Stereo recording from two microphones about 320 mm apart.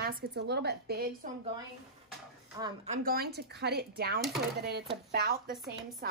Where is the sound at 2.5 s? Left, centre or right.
Centre.